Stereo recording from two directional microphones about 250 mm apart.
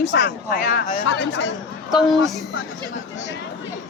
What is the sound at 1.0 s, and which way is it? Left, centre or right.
Speech, left.